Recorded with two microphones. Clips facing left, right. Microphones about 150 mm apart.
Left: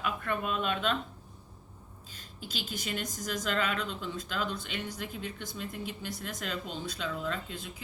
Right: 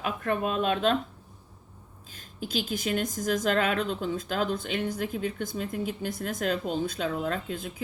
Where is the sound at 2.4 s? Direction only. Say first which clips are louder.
Right 9 dB; 50° right (ahead or behind).